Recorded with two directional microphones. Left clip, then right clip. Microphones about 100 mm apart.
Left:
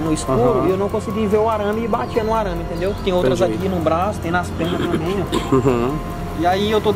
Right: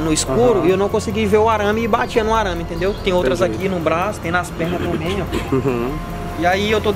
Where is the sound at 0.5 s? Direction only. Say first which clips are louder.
Right 2 dB; 15° right (ahead or behind).